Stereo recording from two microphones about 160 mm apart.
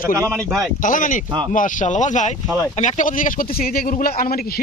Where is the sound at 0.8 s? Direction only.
55° left (ahead or behind).